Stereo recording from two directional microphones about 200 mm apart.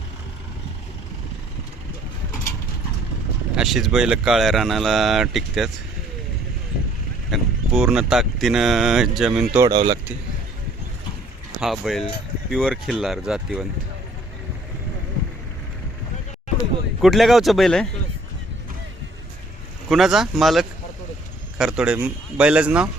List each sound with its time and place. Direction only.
3.5 s speech: centre (ahead or behind)
7.3 s speech: centre (ahead or behind)
9.6 s speech: 20° right (ahead or behind)
11.6 s speech: centre (ahead or behind)
17.0 s speech: centre (ahead or behind)
19.9 s speech: centre (ahead or behind)